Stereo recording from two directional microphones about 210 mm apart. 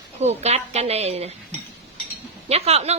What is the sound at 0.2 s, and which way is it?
A woman's voice, 30° right (ahead or behind).